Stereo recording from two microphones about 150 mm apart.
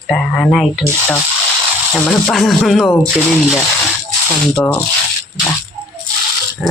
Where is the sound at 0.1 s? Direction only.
5° left (ahead or behind).